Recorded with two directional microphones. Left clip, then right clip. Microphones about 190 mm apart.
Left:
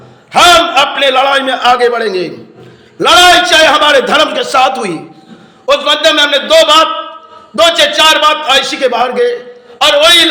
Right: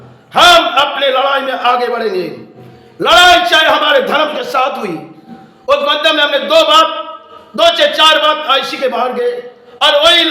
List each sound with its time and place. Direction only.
0.3 s a man's voice: 20° left (ahead or behind)